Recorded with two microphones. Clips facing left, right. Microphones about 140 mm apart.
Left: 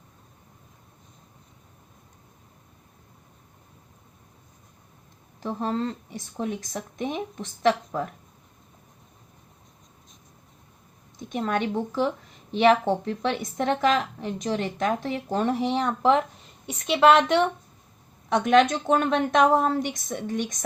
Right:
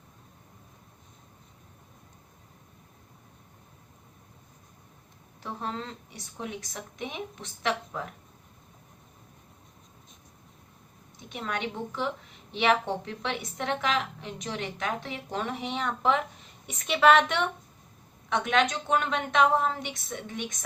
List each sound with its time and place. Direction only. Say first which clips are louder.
5.4 s a woman's voice: left 8 dB; 45° left (ahead or behind)
11.2 s a woman's voice: left 7 dB; 45° left (ahead or behind)